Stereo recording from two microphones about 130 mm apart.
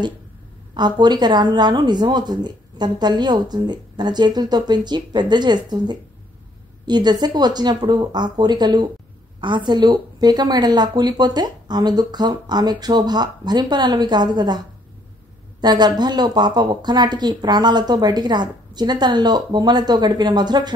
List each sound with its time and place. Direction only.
0.7 s speech: 35° right (ahead or behind)
15.6 s speech: 35° right (ahead or behind)